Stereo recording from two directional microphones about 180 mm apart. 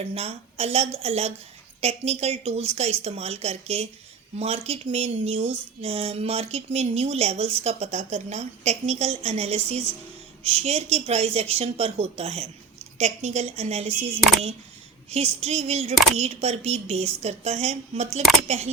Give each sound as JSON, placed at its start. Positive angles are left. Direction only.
{"t": 0.0, "sound": "speech", "side_deg": -35}
{"t": 15.1, "sound": "speech", "side_deg": -35}